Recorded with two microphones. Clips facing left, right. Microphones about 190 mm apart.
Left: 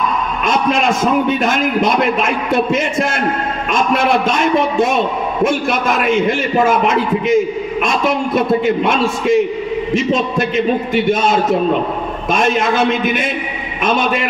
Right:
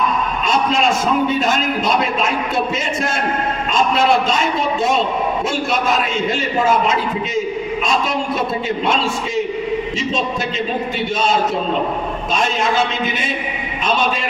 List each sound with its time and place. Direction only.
2.0 s a man's voice: 55° left (ahead or behind)
4.3 s a man's voice: 55° left (ahead or behind)
6.6 s a man's voice: 55° left (ahead or behind)
8.6 s a man's voice: 55° left (ahead or behind)
12.3 s a man's voice: 55° left (ahead or behind)